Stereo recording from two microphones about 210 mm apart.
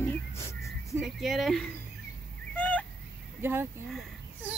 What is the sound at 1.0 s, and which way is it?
Speech, centre (ahead or behind).